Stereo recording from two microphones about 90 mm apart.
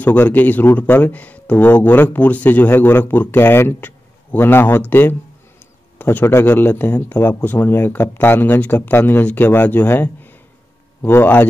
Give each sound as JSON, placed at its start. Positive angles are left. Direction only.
{"t": 0.0, "sound": "speech", "side_deg": 20}